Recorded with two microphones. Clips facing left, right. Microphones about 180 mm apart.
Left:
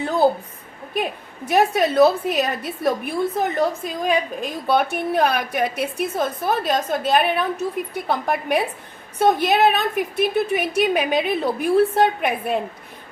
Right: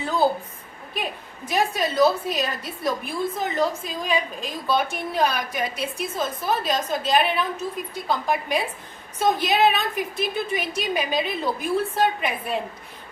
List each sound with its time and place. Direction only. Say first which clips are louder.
1.5 s a woman's voice: left 6 dB; 60° left (ahead or behind)